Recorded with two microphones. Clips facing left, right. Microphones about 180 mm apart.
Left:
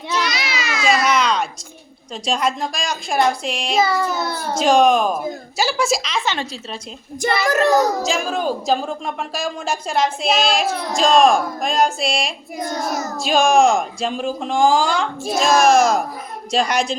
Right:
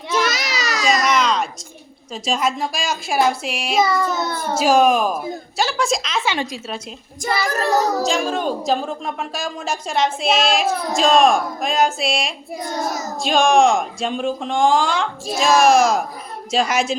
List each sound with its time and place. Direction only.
0.2 s baby cry: 45° right (ahead or behind)
1.0 s a sound: centre (ahead or behind)
2.2 s a woman's voice: centre (ahead or behind)
4.5 s a woman's voice: 5° right (ahead or behind)
8.0 s a woman's voice: centre (ahead or behind)